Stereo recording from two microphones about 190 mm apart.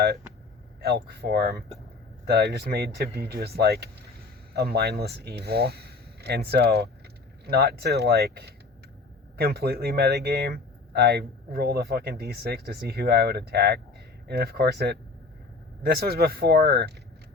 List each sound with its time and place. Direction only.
0.8 s speech: 55° right (ahead or behind)